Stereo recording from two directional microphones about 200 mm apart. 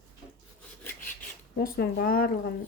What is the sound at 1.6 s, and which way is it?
Speech, 50° left (ahead or behind).